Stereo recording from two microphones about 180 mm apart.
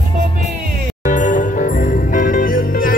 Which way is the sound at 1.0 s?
45° left (ahead or behind).